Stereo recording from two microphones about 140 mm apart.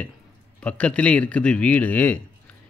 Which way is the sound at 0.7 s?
10° left (ahead or behind).